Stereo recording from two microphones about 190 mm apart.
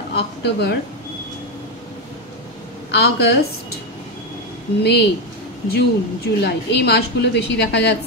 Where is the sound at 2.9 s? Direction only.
60° left (ahead or behind).